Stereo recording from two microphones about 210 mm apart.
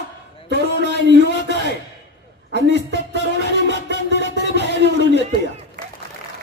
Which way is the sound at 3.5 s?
55° left (ahead or behind).